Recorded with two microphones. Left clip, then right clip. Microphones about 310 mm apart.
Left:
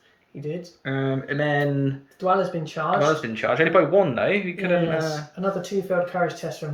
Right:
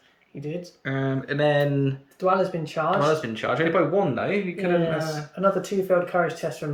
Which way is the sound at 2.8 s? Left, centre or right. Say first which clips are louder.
Right 2 dB; centre.